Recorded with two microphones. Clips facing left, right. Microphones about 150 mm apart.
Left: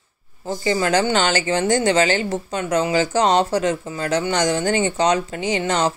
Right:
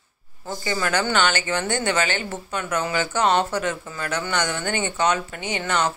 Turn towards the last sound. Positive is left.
turn(degrees=35)  # may be behind; listen again after turning